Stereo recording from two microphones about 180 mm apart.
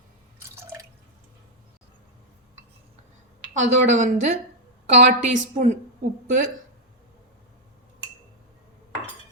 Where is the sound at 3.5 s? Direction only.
45° right (ahead or behind).